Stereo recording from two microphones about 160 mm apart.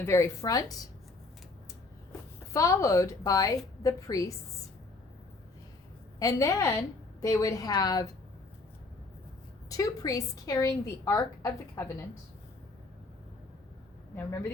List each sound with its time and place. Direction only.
0.0 s a woman's voice: 15° left (ahead or behind)
2.5 s a woman's voice: 20° left (ahead or behind)
6.1 s a woman's voice: 20° left (ahead or behind)
9.6 s a woman's voice: 20° left (ahead or behind)